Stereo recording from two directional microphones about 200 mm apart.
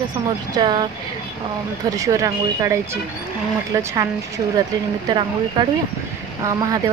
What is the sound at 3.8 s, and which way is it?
Speech, 15° right (ahead or behind).